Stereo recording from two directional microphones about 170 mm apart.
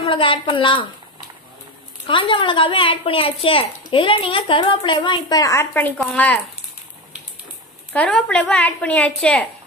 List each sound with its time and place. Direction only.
0.0 s a woman's voice: 30° left (ahead or behind)
2.0 s a woman's voice: 30° left (ahead or behind); by 6.4 s 10° left (ahead or behind)
7.9 s a woman's voice: 5° left (ahead or behind)